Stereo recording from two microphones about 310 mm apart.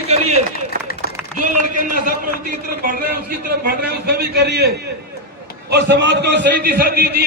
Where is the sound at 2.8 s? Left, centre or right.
Right.